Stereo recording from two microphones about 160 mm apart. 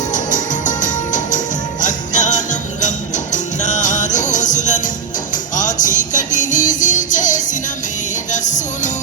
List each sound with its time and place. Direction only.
0.1 s music: 50° left (ahead or behind)
1.8 s jingle bell: 50° left (ahead or behind)
3.3 s music: 50° left (ahead or behind)